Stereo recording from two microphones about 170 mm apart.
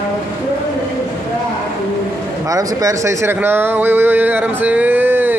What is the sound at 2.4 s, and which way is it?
Speech, 20° right (ahead or behind).